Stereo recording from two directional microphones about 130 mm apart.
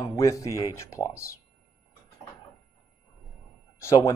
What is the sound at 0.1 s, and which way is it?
Speech, 25° left (ahead or behind).